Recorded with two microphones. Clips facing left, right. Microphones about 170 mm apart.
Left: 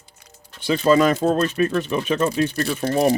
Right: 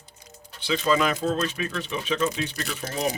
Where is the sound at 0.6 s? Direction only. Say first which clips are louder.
Left 7 dB; 45° left (ahead or behind).